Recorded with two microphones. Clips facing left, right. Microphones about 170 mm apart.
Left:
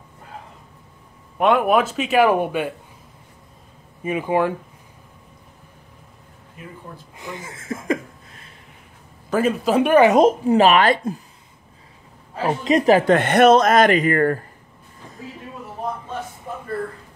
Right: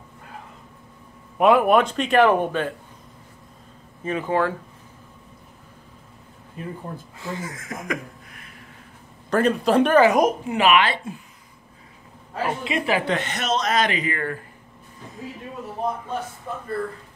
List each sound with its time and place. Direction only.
1.4 s a man's voice: centre (ahead or behind)
4.0 s speech: 10° left (ahead or behind)
6.6 s speech: 30° right (ahead or behind)
7.2 s a sound: 20° left (ahead or behind)
9.3 s a man's voice: 5° left (ahead or behind)
9.9 s speech: 20° left (ahead or behind); by 11.2 s 40° left (ahead or behind)
12.4 s speech: 40° left (ahead or behind)